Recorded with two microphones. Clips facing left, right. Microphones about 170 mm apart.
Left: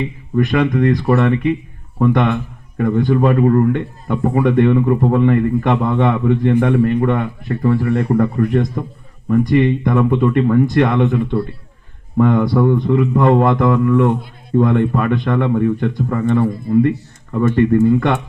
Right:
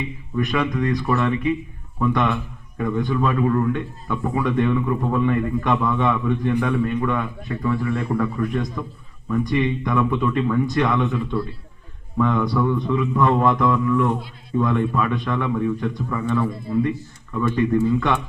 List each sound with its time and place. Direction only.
0.0 s a man's voice: 55° left (ahead or behind)
6.0 s a man's voice: 60° left (ahead or behind)